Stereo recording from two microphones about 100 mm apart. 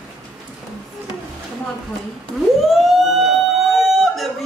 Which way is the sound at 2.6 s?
Centre (ahead or behind).